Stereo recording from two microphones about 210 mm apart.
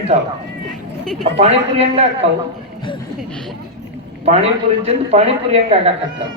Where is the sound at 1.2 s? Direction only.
30° right (ahead or behind).